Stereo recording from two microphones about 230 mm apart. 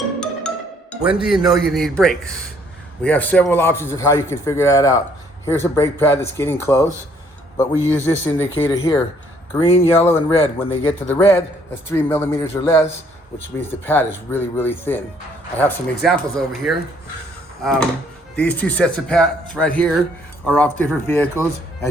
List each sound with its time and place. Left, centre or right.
0.2 s a man's voice: centre
8.7 s speech: left
10.0 s a man's voice: centre
10.3 s speech: left
11.1 s a man's voice: centre